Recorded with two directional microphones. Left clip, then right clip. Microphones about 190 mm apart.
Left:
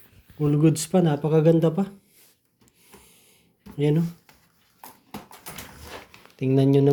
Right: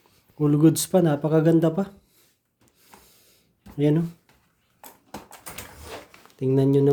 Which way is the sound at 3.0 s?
30° right (ahead or behind).